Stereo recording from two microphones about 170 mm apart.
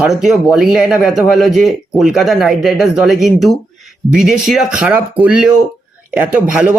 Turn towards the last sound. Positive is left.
turn(degrees=-10)  # may be behind; listen again after turning